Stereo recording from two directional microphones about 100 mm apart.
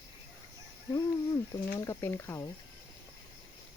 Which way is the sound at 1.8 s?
25° left (ahead or behind).